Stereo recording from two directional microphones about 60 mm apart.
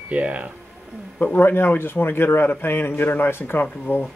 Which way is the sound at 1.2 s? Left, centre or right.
Left.